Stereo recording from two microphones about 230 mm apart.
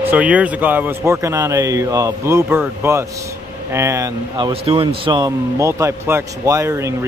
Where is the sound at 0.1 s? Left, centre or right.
Centre.